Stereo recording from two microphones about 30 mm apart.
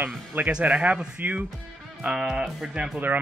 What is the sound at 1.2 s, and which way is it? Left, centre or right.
Speech, right.